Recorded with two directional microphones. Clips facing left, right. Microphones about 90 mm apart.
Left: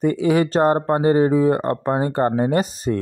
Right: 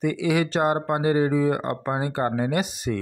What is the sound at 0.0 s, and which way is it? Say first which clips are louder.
Speech: left 5 dB; 40° left (ahead or behind).